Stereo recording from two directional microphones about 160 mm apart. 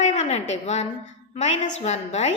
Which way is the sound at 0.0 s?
45° left (ahead or behind).